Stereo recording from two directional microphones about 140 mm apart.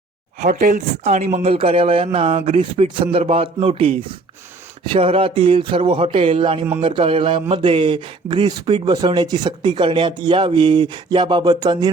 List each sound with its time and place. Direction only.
0.4 s speech: 60° right (ahead or behind); by 11.9 s 30° right (ahead or behind)